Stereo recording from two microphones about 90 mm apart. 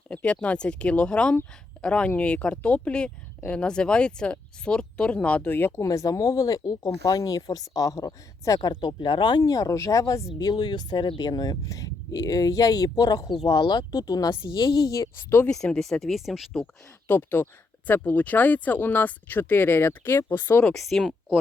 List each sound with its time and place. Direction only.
0.1 s speech: 10° left (ahead or behind)
5.8 s speech: 35° left (ahead or behind)
8.7 s speech: 55° left (ahead or behind)
9.4 s speech: 40° left (ahead or behind)
10.3 s speech: 50° left (ahead or behind)
14.4 s speech: 60° left (ahead or behind)
14.9 s speech: 30° left (ahead or behind)
15.4 s speech: 10° left (ahead or behind)
17.1 s speech: 20° left (ahead or behind)
20.7 s speech: centre (ahead or behind)